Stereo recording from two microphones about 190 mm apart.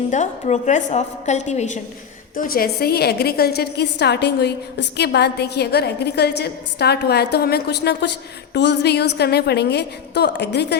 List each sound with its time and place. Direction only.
0.1 s a woman's voice: 40° left (ahead or behind); by 10.8 s 60° left (ahead or behind)